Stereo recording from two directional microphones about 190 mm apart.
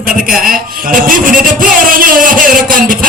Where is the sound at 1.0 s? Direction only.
45° right (ahead or behind).